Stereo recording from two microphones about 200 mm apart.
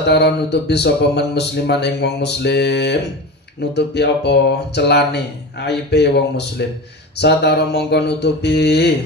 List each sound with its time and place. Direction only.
0.0 s speech: 55° left (ahead or behind)